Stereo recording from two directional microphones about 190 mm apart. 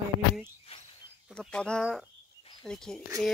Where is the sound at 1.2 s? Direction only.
5° left (ahead or behind).